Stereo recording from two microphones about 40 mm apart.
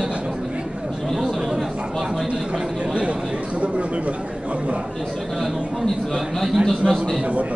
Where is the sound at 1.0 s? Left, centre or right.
Centre.